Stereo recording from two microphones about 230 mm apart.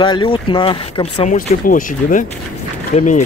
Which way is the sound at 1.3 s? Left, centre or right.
Left.